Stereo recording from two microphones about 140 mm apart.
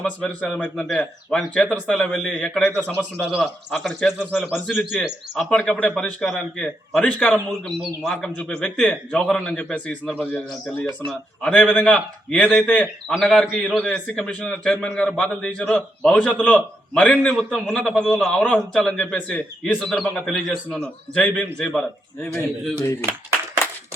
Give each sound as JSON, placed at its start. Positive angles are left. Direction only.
{"t": 0.0, "sound": "a man's voice", "side_deg": 10}